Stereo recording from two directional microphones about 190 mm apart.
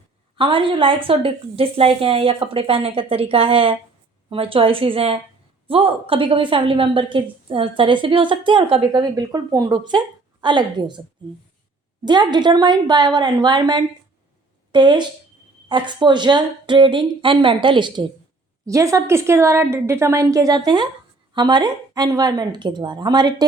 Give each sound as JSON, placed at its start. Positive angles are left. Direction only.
{"t": 0.3, "sound": "a woman's voice", "side_deg": -25}
{"t": 12.0, "sound": "a woman's voice", "side_deg": -25}